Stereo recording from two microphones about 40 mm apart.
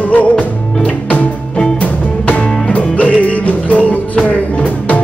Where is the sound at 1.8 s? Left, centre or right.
Left.